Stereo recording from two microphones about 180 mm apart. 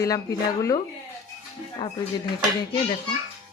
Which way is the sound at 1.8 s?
25° left (ahead or behind).